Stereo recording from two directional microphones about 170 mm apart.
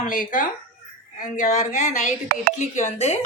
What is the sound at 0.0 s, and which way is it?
A woman's voice, 50° left (ahead or behind).